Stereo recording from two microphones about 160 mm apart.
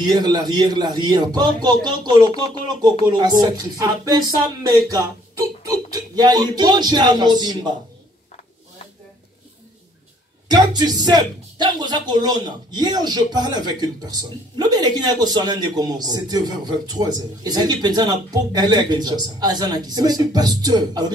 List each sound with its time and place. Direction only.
0.0 s speech: 25° right (ahead or behind)
10.5 s speech: 25° right (ahead or behind)